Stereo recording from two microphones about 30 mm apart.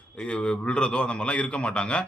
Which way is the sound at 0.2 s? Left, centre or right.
Left.